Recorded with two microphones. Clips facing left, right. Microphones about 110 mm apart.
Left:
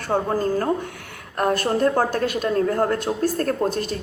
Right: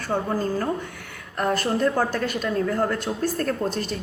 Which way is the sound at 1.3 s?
45° left (ahead or behind).